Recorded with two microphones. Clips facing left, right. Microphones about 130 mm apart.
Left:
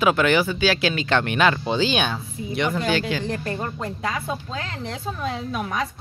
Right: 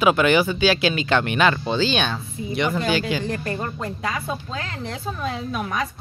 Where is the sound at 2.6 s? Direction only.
5° right (ahead or behind).